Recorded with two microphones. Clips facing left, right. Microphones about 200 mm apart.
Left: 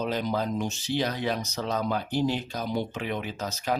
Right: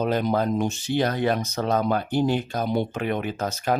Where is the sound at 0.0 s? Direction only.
55° right (ahead or behind).